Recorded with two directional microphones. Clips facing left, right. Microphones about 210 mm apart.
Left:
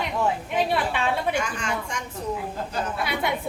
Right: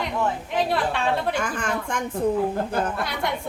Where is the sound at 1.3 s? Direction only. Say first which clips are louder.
Right 1 dB; 55° right (ahead or behind).